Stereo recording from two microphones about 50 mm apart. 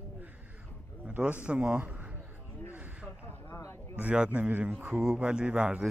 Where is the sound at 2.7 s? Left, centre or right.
Right.